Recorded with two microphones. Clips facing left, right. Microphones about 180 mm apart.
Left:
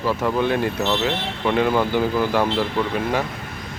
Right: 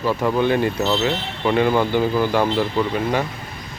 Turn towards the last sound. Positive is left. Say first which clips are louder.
# right 2 dB
turn(degrees=0)  # may be behind; listen again after turning